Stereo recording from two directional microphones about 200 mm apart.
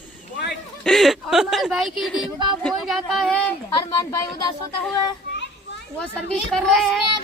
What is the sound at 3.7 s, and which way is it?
Speech, 20° left (ahead or behind).